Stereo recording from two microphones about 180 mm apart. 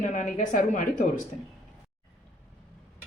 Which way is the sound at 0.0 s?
40° left (ahead or behind).